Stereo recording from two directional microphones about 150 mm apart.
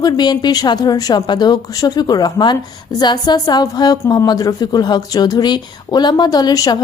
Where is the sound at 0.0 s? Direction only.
30° left (ahead or behind).